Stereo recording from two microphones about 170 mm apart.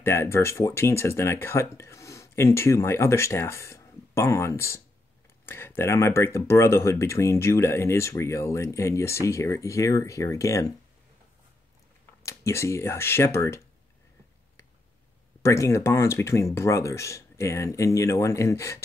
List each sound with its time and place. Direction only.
0.0 s speech: 15° left (ahead or behind)
12.2 s speech: 15° left (ahead or behind)
15.4 s speech: 15° left (ahead or behind)